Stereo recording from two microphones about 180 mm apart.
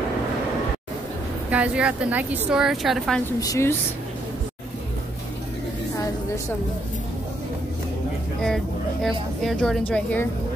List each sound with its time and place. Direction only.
1.5 s a woman's voice: 5° right (ahead or behind)
3.3 s a woman's voice: 15° left (ahead or behind)
8.4 s speech: centre (ahead or behind)